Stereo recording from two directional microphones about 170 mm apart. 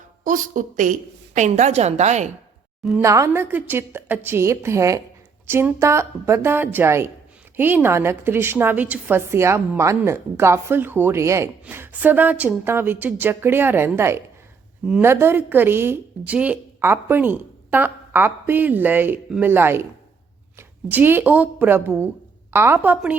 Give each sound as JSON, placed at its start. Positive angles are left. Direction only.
{"t": 0.3, "sound": "a woman's voice", "side_deg": -50}
{"t": 3.0, "sound": "a woman's voice", "side_deg": -15}